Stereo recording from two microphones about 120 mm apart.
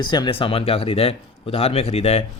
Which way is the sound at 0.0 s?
40° left (ahead or behind).